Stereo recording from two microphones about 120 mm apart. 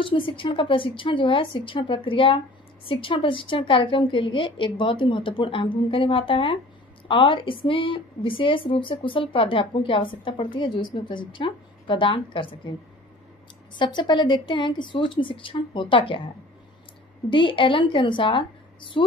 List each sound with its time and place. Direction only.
0.0 s a woman's voice: 45° left (ahead or behind)
13.7 s a woman's voice: 40° left (ahead or behind)
17.3 s a woman's voice: 45° left (ahead or behind)